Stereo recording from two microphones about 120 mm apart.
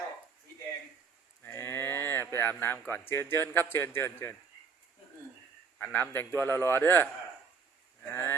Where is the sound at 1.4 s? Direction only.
20° left (ahead or behind).